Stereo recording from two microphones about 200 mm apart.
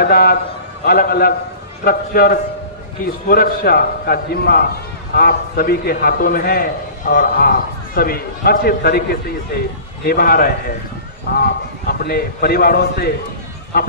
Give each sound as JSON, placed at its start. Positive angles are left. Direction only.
{"t": 0.0, "sound": "a man's voice", "side_deg": 50}